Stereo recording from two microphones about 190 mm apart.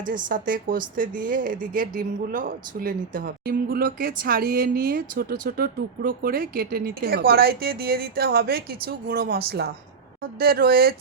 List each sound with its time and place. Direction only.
0.3 s speech: 45° right (ahead or behind)
10.4 s speech: 55° right (ahead or behind)